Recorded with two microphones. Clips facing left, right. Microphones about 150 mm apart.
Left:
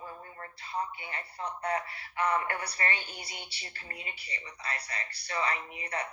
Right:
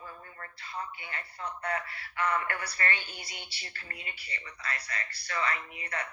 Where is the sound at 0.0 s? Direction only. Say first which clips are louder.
Left 2 dB; 25° left (ahead or behind).